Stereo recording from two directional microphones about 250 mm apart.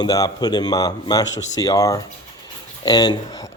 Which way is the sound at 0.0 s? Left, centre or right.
Centre.